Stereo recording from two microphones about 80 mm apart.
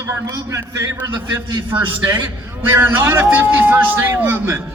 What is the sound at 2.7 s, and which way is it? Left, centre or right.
A man's voice, right.